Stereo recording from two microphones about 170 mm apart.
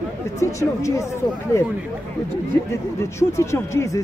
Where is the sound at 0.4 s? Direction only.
20° left (ahead or behind).